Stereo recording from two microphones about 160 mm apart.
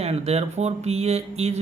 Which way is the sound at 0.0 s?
40° right (ahead or behind).